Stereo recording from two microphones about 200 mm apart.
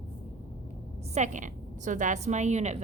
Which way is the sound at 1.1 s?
35° right (ahead or behind).